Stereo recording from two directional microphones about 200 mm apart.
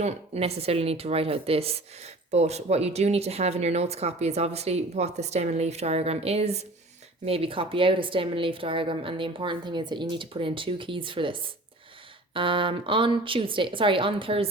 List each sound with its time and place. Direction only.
0.0 s a woman's voice: 30° right (ahead or behind)